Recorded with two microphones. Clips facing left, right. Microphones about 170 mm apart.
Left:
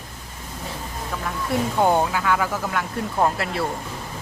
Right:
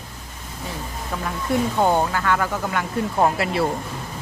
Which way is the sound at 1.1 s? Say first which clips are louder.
Right 2 dB; 10° right (ahead or behind).